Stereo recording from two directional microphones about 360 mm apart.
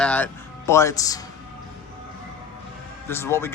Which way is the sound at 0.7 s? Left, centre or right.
Centre.